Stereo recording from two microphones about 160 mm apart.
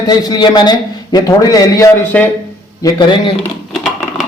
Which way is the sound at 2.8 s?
25° left (ahead or behind).